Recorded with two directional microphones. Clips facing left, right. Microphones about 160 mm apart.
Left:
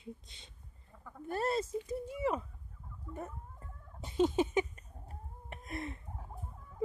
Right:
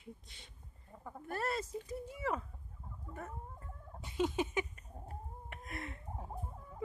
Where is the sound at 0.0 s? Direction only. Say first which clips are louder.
Left 4 dB; 20° left (ahead or behind).